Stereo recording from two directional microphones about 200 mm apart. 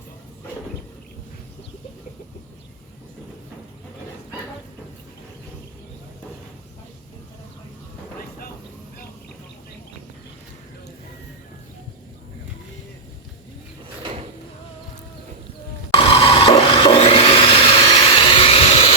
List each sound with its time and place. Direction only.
16.0 s wood: 30° left (ahead or behind)